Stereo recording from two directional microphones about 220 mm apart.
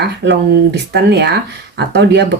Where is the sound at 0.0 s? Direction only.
50° right (ahead or behind).